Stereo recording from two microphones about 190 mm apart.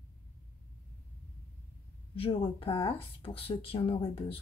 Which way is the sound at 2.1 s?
30° left (ahead or behind).